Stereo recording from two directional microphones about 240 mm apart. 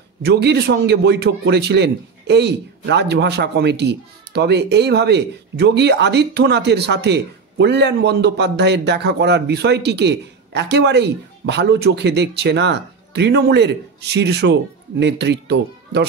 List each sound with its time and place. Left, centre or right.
0.2 s a man's voice: right